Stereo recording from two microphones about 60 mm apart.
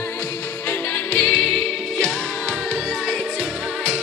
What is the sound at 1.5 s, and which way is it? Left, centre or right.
Music, centre.